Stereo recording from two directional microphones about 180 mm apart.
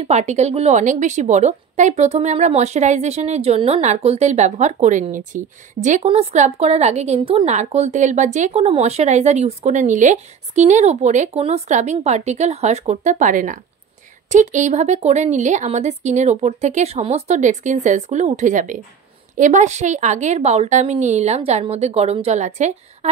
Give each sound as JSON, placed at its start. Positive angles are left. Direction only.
{"t": 0.0, "sound": "a woman's voice", "side_deg": -40}